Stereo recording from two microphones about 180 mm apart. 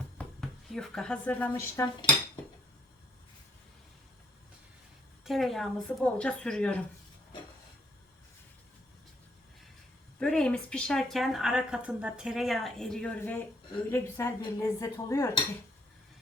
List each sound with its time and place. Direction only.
0.2 s speech: centre (ahead or behind); by 2.4 s 25° left (ahead or behind)
5.2 s a woman's voice: centre (ahead or behind)
10.2 s a woman's voice: 5° left (ahead or behind)